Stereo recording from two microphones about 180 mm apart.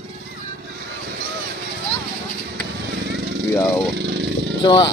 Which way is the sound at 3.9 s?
75° right (ahead or behind).